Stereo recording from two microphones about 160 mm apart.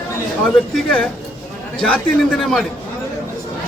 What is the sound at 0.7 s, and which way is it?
A man's voice, 5° left (ahead or behind).